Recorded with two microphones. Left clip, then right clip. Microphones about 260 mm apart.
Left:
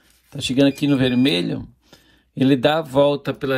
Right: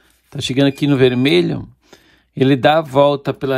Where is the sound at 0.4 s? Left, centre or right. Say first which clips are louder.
Right 2 dB; right.